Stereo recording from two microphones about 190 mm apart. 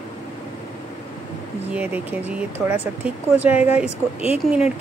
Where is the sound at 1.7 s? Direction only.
10° right (ahead or behind).